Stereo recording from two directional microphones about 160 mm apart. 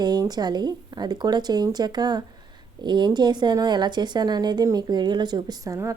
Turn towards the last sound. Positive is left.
turn(degrees=-20)  # may be behind; listen again after turning